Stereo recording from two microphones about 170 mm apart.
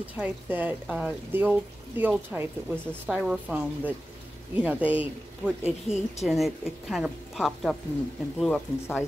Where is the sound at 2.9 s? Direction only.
Centre (ahead or behind).